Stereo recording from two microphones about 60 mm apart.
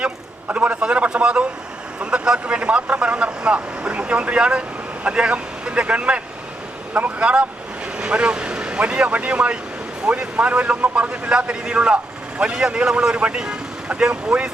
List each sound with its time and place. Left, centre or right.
0.4 s speech: right